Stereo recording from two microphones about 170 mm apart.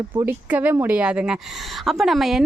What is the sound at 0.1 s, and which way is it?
A woman's voice, 15° right (ahead or behind).